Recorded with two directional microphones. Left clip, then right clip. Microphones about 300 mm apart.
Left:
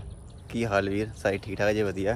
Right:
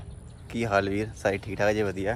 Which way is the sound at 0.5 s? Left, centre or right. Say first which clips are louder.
Right 1 dB; centre.